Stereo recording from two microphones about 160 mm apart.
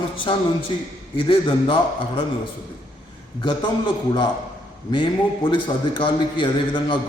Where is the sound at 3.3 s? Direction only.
30° left (ahead or behind).